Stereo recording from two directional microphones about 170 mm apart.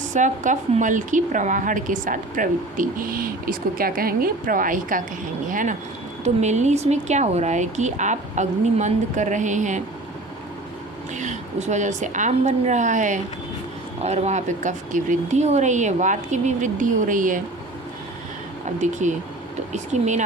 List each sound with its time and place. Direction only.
0.0 s a woman's voice: 45° right (ahead or behind)
11.1 s a woman's voice: 45° right (ahead or behind)
18.6 s a woman's voice: 45° right (ahead or behind)